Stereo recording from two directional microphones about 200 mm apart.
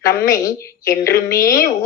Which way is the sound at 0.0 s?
15° left (ahead or behind).